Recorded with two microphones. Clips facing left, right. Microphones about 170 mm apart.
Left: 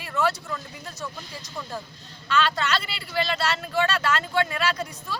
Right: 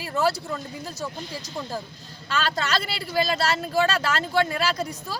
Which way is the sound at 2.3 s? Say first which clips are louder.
Left 2 dB; 40° right (ahead or behind).